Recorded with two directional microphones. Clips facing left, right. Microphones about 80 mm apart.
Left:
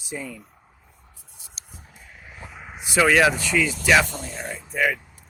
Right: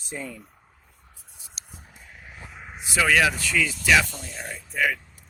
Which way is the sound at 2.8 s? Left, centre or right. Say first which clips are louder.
Left 3 dB; left.